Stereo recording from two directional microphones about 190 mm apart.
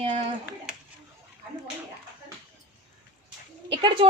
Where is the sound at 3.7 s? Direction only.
25° right (ahead or behind).